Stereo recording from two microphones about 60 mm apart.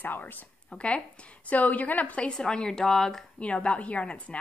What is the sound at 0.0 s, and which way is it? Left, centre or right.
Speech, left.